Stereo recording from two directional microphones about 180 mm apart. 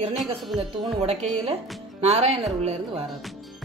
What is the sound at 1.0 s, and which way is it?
Speech, 35° right (ahead or behind).